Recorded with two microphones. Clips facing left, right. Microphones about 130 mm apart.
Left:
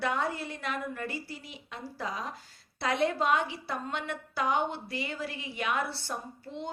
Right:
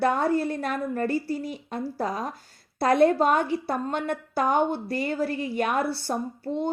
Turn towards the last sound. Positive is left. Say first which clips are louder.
# right 11 dB
turn(degrees=-45)  # may be behind; listen again after turning